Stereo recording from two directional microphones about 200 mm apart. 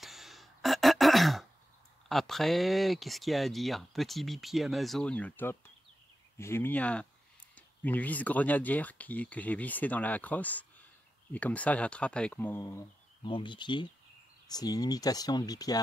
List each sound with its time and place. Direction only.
0.0 s throat clearing: centre (ahead or behind)
2.0 s speech: centre (ahead or behind)
13.2 s speech: 25° left (ahead or behind)